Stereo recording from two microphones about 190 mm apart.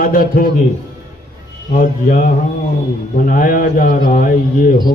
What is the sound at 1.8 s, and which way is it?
A man's voice, 45° left (ahead or behind).